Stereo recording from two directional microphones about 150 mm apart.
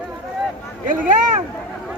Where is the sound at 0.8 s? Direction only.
60° right (ahead or behind).